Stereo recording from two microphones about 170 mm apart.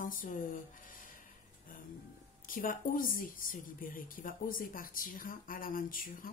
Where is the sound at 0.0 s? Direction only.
55° left (ahead or behind).